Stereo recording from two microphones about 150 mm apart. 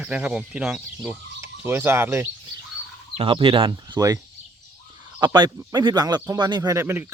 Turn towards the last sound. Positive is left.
turn(degrees=-15)  # may be behind; listen again after turning